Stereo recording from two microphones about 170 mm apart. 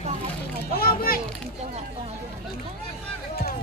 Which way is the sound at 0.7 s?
60° left (ahead or behind).